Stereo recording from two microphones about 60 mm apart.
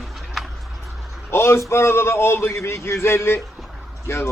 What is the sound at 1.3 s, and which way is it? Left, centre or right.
A man's voice, left.